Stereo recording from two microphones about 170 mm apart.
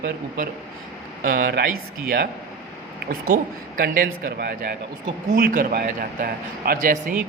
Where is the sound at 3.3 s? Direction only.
55° right (ahead or behind).